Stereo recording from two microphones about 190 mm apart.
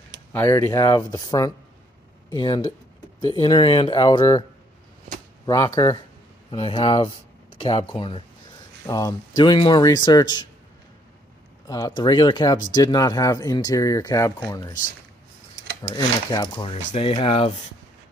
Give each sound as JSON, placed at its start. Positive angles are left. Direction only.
{"t": 0.3, "sound": "speech", "side_deg": 10}
{"t": 5.5, "sound": "speech", "side_deg": 15}
{"t": 6.5, "sound": "speech", "side_deg": 30}
{"t": 11.6, "sound": "speech", "side_deg": 20}
{"t": 15.9, "sound": "speech", "side_deg": 20}